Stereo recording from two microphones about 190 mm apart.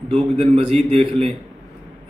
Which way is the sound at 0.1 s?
30° right (ahead or behind).